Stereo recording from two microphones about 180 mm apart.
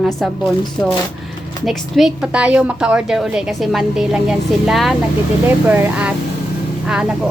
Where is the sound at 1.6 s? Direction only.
Centre (ahead or behind).